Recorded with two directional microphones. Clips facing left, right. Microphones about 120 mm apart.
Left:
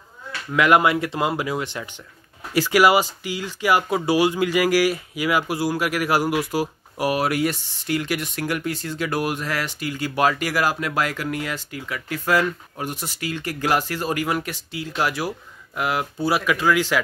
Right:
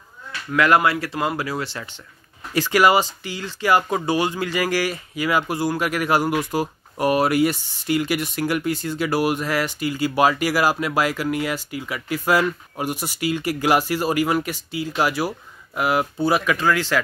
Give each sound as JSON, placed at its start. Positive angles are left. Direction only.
{"t": 0.5, "sound": "speech", "side_deg": 15}